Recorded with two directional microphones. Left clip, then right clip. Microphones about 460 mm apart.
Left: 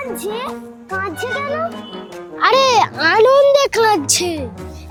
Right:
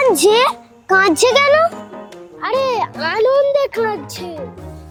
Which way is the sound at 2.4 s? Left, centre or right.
Left.